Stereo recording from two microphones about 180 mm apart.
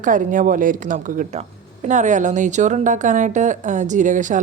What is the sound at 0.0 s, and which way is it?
A woman's voice, 45° right (ahead or behind).